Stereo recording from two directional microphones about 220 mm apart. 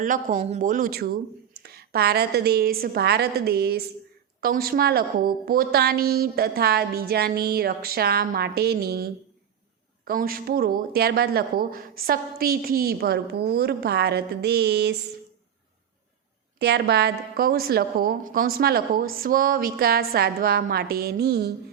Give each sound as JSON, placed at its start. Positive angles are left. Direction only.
{"t": 0.0, "sound": "a woman's voice", "side_deg": -35}
{"t": 16.6, "sound": "a woman's voice", "side_deg": -50}